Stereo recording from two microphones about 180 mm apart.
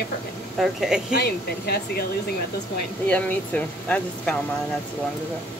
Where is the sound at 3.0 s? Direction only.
5° left (ahead or behind).